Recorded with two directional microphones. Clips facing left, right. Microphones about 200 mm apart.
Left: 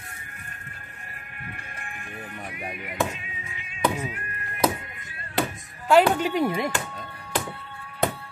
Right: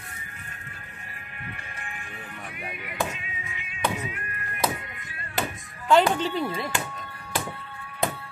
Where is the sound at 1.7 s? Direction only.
50° left (ahead or behind).